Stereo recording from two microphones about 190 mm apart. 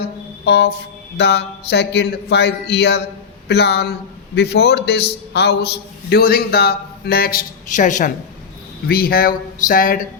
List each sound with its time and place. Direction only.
0.4 s a man's voice: 60° left (ahead or behind); by 8.1 s 40° left (ahead or behind)
8.9 s speech: 50° left (ahead or behind)